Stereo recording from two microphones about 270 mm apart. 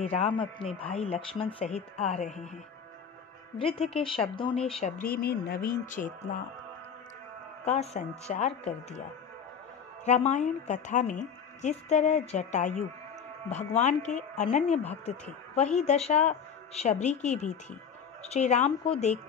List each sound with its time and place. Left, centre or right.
0.0 s speech: left
3.5 s speech: left
7.6 s speech: left
10.0 s speech: left